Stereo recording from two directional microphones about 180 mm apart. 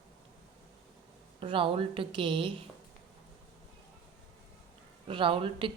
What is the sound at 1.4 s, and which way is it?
A woman's voice, 30° right (ahead or behind).